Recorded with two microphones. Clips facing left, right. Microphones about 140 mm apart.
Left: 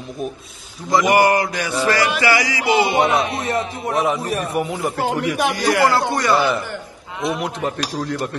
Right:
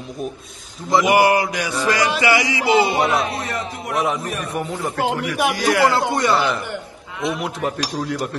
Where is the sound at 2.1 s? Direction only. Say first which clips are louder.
Even; 20° right (ahead or behind).